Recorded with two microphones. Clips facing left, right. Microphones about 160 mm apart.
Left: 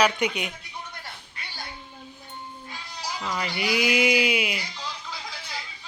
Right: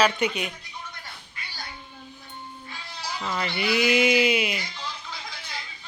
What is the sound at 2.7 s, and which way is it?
Speech, 10° left (ahead or behind).